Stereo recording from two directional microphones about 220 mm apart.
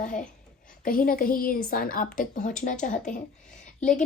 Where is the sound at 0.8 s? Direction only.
40° left (ahead or behind).